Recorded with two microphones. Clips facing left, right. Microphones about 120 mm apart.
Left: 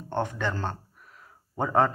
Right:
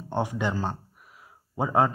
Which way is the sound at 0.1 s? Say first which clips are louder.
Right 1 dB; 10° right (ahead or behind).